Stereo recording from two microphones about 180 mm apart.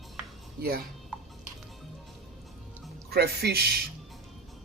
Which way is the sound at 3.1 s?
65° right (ahead or behind).